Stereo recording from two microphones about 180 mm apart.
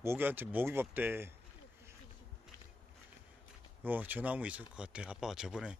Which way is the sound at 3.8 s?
10° right (ahead or behind).